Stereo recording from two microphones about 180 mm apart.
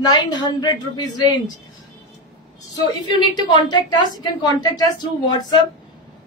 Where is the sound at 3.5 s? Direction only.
25° left (ahead or behind).